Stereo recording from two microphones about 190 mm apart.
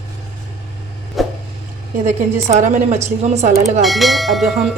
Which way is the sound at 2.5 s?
40° right (ahead or behind).